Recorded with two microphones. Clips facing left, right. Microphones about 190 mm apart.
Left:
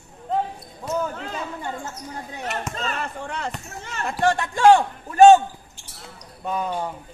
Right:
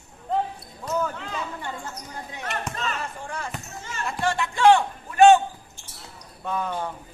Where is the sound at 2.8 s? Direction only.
60° left (ahead or behind).